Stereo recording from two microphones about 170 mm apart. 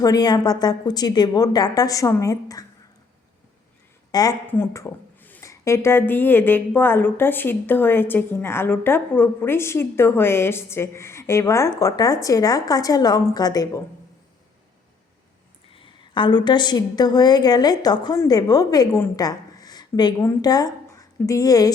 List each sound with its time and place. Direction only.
0.0 s a woman's voice: 20° left (ahead or behind)
4.1 s a woman's voice: 20° left (ahead or behind)
15.7 s a woman's voice: 30° left (ahead or behind)